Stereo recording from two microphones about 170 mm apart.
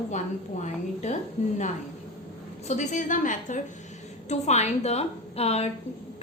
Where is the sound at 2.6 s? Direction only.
45° left (ahead or behind).